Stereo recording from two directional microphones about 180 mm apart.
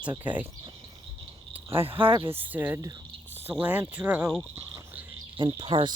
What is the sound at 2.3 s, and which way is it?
Speech, 10° right (ahead or behind).